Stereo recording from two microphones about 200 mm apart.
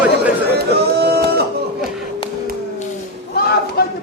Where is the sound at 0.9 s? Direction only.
55° right (ahead or behind).